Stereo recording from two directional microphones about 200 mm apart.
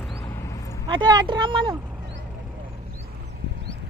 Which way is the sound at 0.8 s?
20° right (ahead or behind).